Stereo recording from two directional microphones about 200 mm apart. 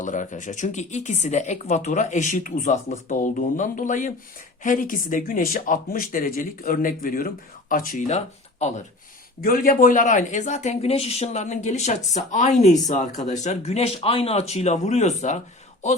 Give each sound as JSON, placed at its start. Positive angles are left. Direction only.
{"t": 0.0, "sound": "speech", "side_deg": 40}
{"t": 9.4, "sound": "speech", "side_deg": 45}